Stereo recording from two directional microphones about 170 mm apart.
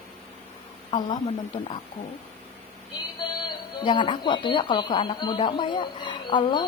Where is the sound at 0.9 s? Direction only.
25° left (ahead or behind).